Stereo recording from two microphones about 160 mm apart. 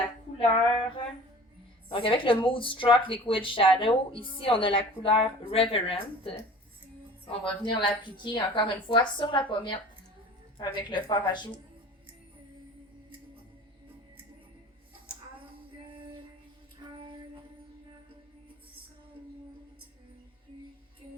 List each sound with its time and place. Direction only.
0.3 s a woman's voice: 35° left (ahead or behind)